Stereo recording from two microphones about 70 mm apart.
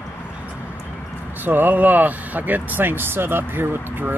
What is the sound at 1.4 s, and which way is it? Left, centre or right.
Speech, right.